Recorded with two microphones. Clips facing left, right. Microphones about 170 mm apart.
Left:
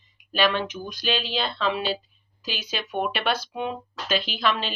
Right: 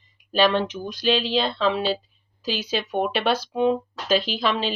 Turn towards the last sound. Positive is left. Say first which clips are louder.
# right 2 dB
turn(degrees=-35)  # may be behind; listen again after turning